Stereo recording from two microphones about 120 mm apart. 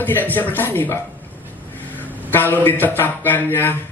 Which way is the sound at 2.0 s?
15° right (ahead or behind).